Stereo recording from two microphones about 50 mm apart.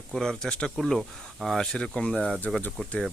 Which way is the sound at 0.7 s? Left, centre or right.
Centre.